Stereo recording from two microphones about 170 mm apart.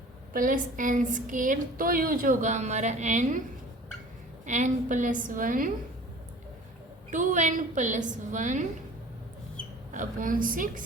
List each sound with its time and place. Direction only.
0.3 s a woman's voice: 55° right (ahead or behind)
4.4 s a woman's voice: 45° right (ahead or behind)
7.1 s a woman's voice: 45° right (ahead or behind)
9.9 s a woman's voice: 50° right (ahead or behind)